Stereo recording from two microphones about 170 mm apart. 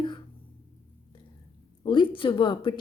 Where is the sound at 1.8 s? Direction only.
30° left (ahead or behind).